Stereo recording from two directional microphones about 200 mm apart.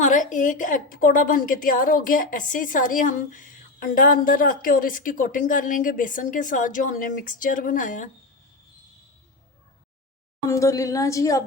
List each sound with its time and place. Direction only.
0.0 s a woman's voice: 40° left (ahead or behind)
10.5 s a woman's voice: 15° left (ahead or behind)